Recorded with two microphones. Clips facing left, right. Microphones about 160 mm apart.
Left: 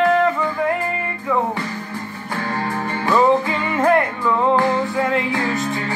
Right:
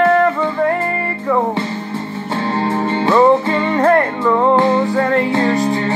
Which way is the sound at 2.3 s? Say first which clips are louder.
Right 6 dB; 25° right (ahead or behind).